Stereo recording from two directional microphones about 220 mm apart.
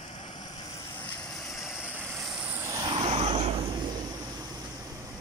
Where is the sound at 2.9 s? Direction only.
25° right (ahead or behind).